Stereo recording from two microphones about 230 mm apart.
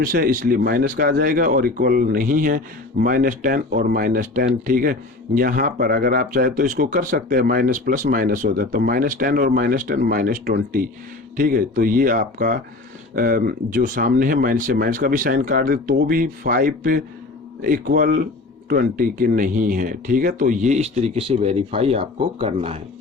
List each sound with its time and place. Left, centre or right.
0.0 s speech: right